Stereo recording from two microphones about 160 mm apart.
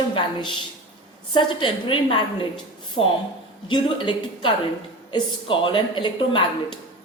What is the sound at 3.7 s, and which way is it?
A woman's voice, 30° left (ahead or behind).